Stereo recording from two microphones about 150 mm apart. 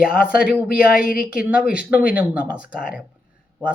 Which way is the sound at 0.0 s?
75° left (ahead or behind).